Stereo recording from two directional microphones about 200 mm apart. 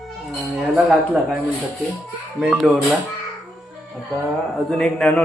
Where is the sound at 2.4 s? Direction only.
5° right (ahead or behind).